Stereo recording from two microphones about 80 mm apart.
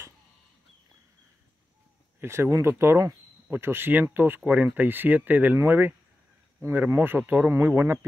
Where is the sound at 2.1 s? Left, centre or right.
Right.